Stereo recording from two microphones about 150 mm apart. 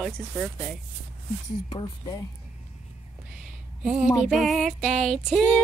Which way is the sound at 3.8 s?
5° right (ahead or behind).